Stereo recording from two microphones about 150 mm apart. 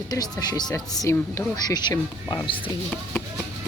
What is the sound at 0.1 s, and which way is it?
Speech, 25° left (ahead or behind).